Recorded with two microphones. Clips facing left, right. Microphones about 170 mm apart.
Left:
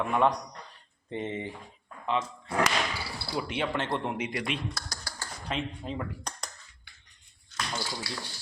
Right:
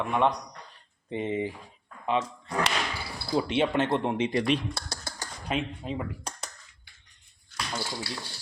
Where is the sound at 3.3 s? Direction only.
20° right (ahead or behind).